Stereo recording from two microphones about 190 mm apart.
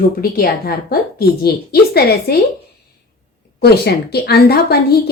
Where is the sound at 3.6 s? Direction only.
55° left (ahead or behind).